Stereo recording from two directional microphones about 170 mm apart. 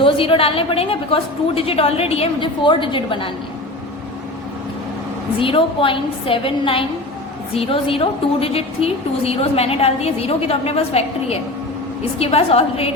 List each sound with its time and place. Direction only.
0.0 s a woman's voice: 30° left (ahead or behind)
5.4 s a woman's voice: 30° left (ahead or behind)